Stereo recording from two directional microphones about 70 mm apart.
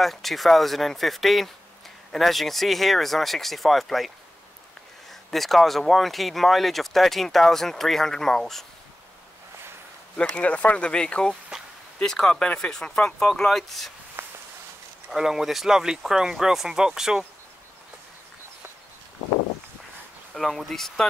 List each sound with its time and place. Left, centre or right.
0.0 s speech: centre
5.3 s speech: centre
10.3 s speech: centre
14.2 s a sound: right
15.0 s speech: centre
20.3 s speech: centre